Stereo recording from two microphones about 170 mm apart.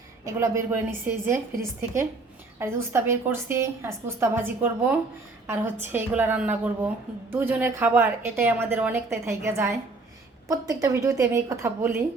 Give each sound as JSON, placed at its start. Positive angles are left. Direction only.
{"t": 0.3, "sound": "a woman's voice", "side_deg": -15}
{"t": 2.6, "sound": "a woman's voice", "side_deg": -15}